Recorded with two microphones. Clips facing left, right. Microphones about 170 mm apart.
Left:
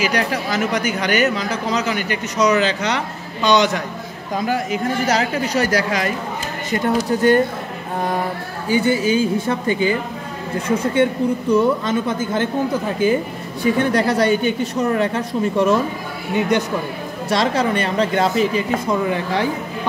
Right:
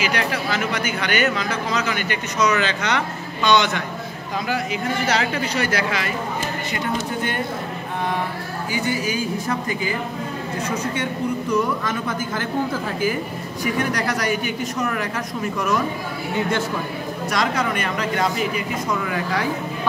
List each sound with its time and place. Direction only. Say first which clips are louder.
0.0 s speech: left 3 dB; 40° left (ahead or behind)
8.6 s a woman's voice: left 8 dB; 30° left (ahead or behind)
11.5 s a woman's voice: left 7 dB; 25° left (ahead or behind)
17.3 s a woman's voice: left 5 dB; 30° left (ahead or behind)